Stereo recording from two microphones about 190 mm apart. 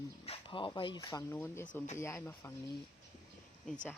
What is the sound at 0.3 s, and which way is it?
Speech, 25° left (ahead or behind).